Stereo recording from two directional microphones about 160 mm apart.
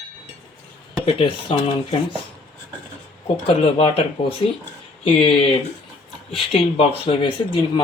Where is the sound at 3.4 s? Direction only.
35° left (ahead or behind).